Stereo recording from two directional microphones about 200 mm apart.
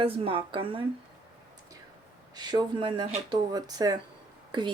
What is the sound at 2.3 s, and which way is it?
Speech, 20° right (ahead or behind).